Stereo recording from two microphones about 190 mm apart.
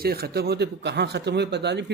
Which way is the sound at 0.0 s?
55° right (ahead or behind).